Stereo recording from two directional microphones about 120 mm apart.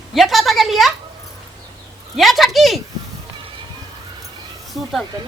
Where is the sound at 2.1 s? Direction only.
Centre (ahead or behind).